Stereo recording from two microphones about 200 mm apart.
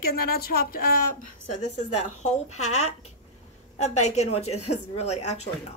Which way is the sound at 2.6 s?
90° left.